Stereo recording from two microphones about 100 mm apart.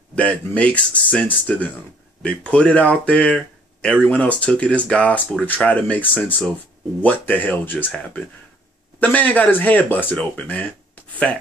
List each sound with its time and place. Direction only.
0.1 s speech: 10° left (ahead or behind)